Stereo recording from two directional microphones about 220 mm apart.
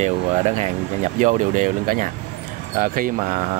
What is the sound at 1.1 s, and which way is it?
Speech, 35° right (ahead or behind).